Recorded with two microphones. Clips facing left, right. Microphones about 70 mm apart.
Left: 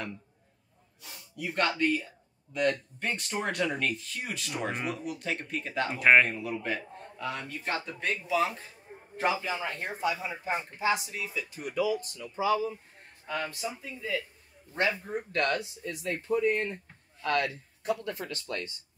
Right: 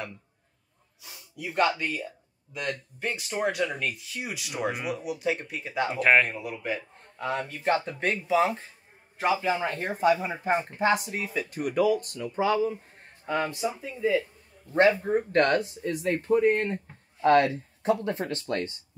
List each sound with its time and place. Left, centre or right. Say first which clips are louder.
1.0 s speech: even; centre
6.3 s speech: right 1 dB; centre
7.2 s speech: right 5 dB; right
9.1 s a man's voice: right 3 dB; centre
9.5 s speech: right 6 dB; right
13.3 s speech: right 6 dB; right
15.3 s speech: right 5 dB; right
17.2 s speech: right 9 dB; right